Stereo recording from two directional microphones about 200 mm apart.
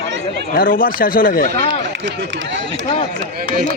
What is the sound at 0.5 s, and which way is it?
Speech, 45° left (ahead or behind).